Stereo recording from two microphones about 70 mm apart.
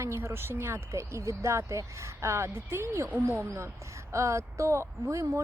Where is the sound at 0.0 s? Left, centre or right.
Right.